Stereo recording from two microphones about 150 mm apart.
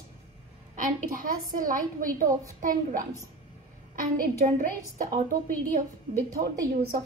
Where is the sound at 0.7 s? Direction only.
65° right (ahead or behind).